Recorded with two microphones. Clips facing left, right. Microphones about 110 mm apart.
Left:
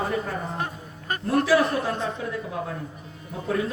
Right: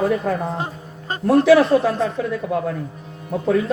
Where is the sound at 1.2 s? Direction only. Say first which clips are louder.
Right 8 dB; 80° right.